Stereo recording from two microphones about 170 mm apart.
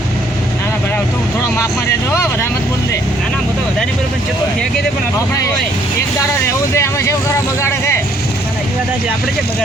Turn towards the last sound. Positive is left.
turn(degrees=15)  # may be behind; listen again after turning